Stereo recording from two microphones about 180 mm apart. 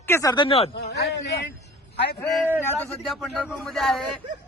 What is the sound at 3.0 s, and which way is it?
A man's voice, centre (ahead or behind).